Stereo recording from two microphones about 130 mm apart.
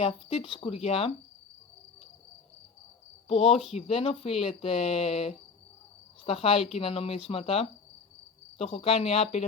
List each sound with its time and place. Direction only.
0.0 s speech: 45° left (ahead or behind)
3.2 s speech: 50° left (ahead or behind)